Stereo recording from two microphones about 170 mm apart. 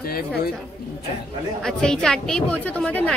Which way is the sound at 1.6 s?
5° left (ahead or behind).